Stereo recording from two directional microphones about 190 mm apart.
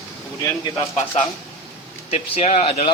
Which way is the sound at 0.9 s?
35° left (ahead or behind).